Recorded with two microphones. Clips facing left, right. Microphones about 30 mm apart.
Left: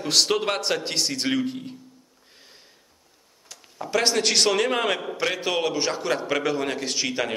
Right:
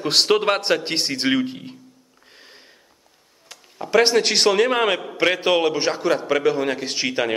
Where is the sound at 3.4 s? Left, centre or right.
Centre.